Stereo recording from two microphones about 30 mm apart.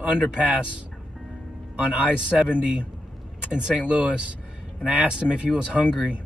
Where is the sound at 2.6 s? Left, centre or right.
Right.